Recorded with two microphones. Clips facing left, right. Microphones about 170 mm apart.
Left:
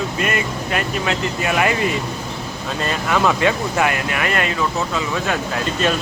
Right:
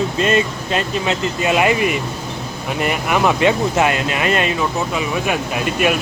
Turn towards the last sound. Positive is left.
turn(degrees=-15)  # may be behind; listen again after turning